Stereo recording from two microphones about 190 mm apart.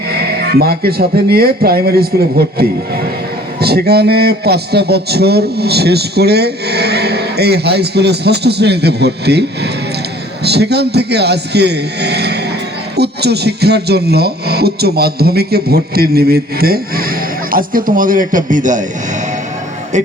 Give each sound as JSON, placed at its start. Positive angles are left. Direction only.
{"t": 0.5, "sound": "a man's voice", "side_deg": -55}